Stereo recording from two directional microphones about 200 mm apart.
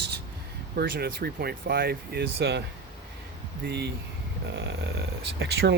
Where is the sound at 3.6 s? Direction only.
55° right (ahead or behind).